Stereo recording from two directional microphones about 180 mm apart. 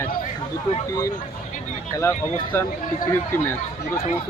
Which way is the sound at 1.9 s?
20° left (ahead or behind).